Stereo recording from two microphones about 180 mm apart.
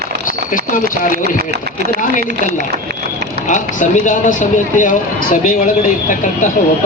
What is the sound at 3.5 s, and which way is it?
Speech, 45° left (ahead or behind).